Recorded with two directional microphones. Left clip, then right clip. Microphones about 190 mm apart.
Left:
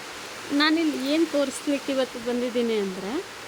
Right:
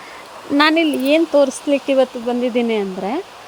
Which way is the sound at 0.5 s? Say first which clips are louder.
Right 8 dB; 40° right (ahead or behind).